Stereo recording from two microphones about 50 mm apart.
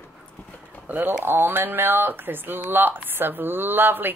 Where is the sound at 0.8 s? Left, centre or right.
Right.